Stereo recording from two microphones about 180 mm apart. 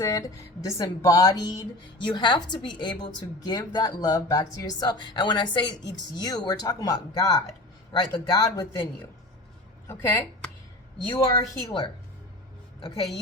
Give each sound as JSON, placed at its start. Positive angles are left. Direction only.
{"t": 0.0, "sound": "a woman's voice", "side_deg": 20}